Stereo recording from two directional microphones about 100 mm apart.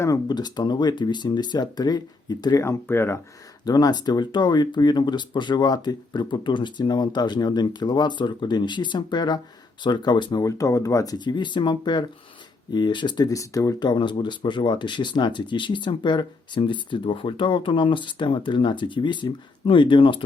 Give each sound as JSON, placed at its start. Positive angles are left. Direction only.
{"t": 0.3, "sound": "speech", "side_deg": 45}
{"t": 2.8, "sound": "speech", "side_deg": 25}
{"t": 3.7, "sound": "speech", "side_deg": 40}
{"t": 10.4, "sound": "speech", "side_deg": 35}
{"t": 13.2, "sound": "speech", "side_deg": 35}
{"t": 13.7, "sound": "speech", "side_deg": 50}